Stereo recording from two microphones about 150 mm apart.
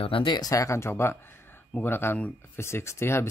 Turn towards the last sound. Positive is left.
turn(degrees=15)  # may be behind; listen again after turning